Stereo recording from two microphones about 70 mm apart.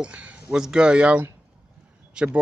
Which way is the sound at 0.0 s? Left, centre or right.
Centre.